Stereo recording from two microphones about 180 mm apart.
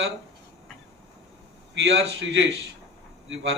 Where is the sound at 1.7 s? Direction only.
85° right.